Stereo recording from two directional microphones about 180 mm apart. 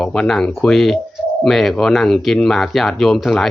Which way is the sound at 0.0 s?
5° left (ahead or behind).